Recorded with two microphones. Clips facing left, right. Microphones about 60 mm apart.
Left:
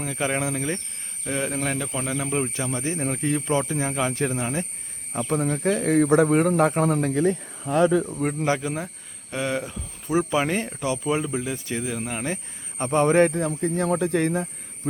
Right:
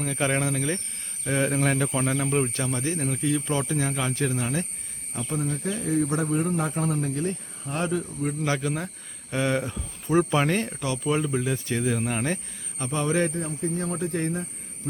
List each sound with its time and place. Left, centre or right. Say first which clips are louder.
0.0 s speech: even; centre
1.2 s speech: right 3 dB; centre
2.8 s speech: left 1 dB; left
3.7 s speech: left 2 dB; centre
4.1 s speech: left 1 dB; left
5.3 s speech: left 6 dB; left
8.2 s speech: left 3 dB; left
8.4 s speech: left 1 dB; centre
9.3 s speech: right 1 dB; centre
12.8 s a man's voice: left 7 dB; left
13.3 s speech: left 4 dB; left